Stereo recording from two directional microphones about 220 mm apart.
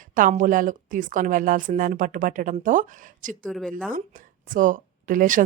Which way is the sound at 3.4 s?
Centre (ahead or behind).